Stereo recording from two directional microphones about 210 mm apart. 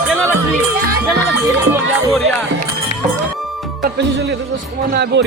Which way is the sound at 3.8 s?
55° right (ahead or behind).